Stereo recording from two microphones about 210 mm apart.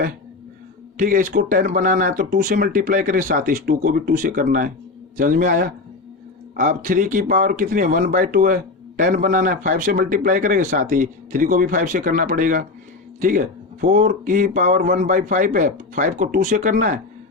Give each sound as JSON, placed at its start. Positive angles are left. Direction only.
{"t": 0.9, "sound": "speech", "side_deg": -40}
{"t": 13.8, "sound": "speech", "side_deg": -40}